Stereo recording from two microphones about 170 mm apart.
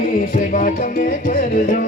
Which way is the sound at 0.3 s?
55° left (ahead or behind).